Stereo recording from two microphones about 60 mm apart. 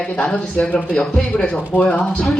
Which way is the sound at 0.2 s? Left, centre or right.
Centre.